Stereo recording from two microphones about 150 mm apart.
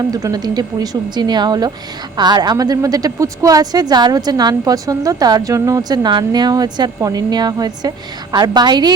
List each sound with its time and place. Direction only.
0.0 s a woman's voice: 25° right (ahead or behind)